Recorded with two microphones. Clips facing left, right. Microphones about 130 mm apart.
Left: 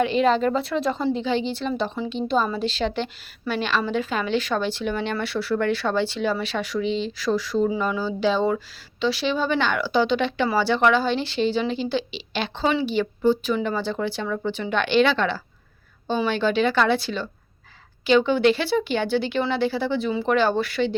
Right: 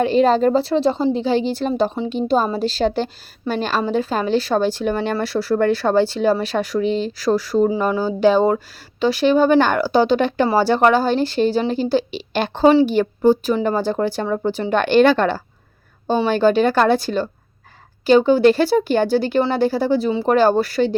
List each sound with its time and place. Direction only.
0.0 s speech: 40° right (ahead or behind)